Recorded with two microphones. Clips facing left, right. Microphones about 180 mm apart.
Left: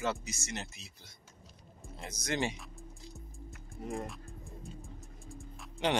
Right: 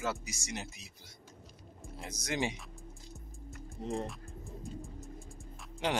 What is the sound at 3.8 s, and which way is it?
Speech, 30° right (ahead or behind).